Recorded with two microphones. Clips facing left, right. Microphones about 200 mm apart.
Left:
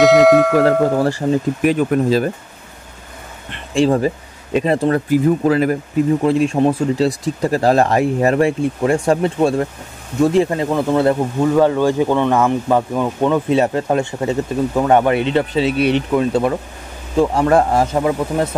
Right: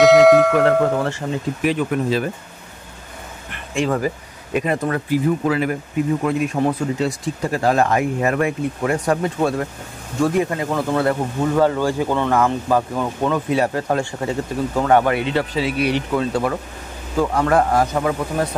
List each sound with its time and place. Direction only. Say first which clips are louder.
0.0 s bell: even; centre (ahead or behind)
0.7 s speech: left 3 dB; 35° left (ahead or behind)
3.4 s speech: left 6 dB; 30° left (ahead or behind)
5.1 s speech: left 3 dB; 40° left (ahead or behind)
6.2 s speech: left 5 dB; 30° left (ahead or behind)